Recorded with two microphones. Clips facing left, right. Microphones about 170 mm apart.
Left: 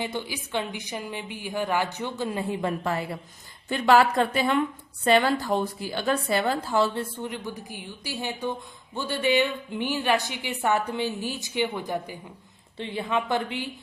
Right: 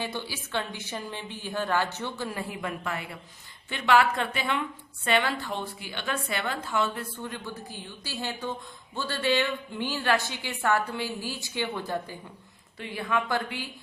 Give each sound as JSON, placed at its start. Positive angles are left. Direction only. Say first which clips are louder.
{"t": 0.0, "sound": "a woman's voice", "louder": "left 3 dB", "side_deg": 15}
{"t": 12.7, "sound": "a woman's voice", "louder": "left 2 dB", "side_deg": 25}